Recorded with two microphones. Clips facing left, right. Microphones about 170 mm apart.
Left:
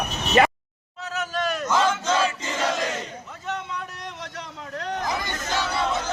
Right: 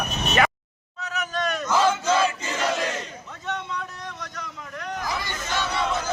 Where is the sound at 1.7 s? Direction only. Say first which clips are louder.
Right 2 dB; 5° right (ahead or behind).